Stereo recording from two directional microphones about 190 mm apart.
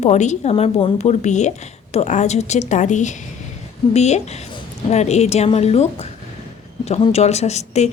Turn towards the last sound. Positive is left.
turn(degrees=35)  # may be behind; listen again after turning